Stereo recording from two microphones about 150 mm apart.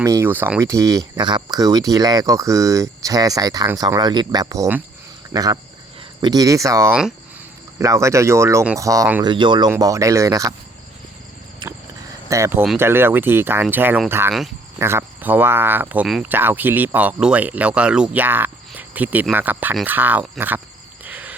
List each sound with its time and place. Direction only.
0.0 s speech: 20° right (ahead or behind)
9.2 s speech: 30° right (ahead or behind)
11.6 s a sound: 30° right (ahead or behind)
12.3 s speech: 15° right (ahead or behind)
21.0 s cricket: 10° right (ahead or behind)